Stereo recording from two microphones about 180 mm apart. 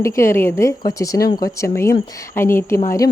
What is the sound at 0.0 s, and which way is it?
Speech, 15° left (ahead or behind).